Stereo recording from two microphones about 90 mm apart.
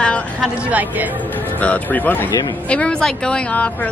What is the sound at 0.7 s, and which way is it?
Speech, 20° right (ahead or behind).